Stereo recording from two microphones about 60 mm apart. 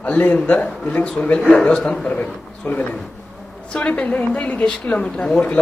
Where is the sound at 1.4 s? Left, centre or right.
Centre.